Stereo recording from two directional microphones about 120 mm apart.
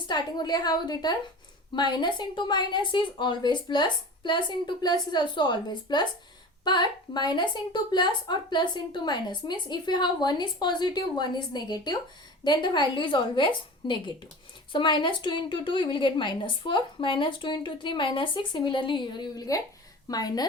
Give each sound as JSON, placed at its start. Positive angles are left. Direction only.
{"t": 0.1, "sound": "a woman's voice", "side_deg": 35}